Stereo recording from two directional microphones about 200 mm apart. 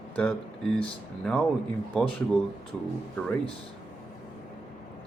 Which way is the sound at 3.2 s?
5° left (ahead or behind).